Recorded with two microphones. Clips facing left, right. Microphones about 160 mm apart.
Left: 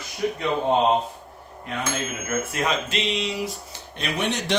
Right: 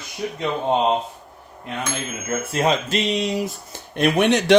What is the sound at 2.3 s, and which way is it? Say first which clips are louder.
Speech: right 1 dB; 30° right (ahead or behind).